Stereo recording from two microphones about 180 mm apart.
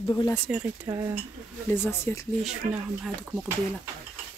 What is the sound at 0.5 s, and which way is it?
Speech, 5° right (ahead or behind).